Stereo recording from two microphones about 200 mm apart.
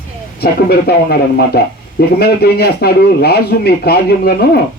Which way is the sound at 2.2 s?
50° left (ahead or behind).